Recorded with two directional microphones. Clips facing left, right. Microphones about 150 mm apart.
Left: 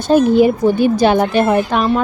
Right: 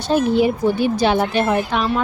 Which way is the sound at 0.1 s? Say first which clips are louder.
Left 6 dB; 45° left (ahead or behind).